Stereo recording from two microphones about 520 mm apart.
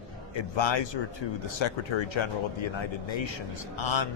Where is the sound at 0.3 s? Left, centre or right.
Left.